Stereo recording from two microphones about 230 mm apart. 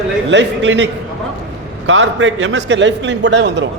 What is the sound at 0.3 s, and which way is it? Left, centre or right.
Speech, right.